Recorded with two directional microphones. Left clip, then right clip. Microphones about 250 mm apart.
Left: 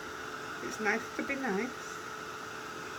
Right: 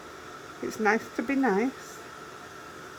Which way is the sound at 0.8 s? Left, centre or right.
Centre.